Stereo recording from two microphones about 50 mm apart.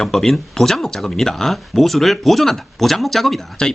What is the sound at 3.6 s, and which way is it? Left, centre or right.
Speech, centre.